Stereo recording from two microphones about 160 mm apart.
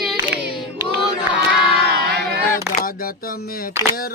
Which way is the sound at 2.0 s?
90° right.